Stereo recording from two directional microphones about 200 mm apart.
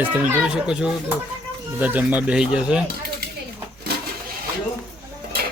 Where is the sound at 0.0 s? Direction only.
10° right (ahead or behind).